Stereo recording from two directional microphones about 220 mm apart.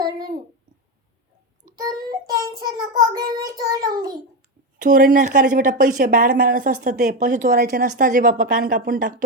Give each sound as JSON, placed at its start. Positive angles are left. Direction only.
{"t": 1.7, "sound": "child singing", "side_deg": -15}
{"t": 4.8, "sound": "speech", "side_deg": -40}